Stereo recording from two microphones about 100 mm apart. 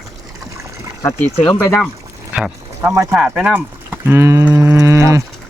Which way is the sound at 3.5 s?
20° right (ahead or behind).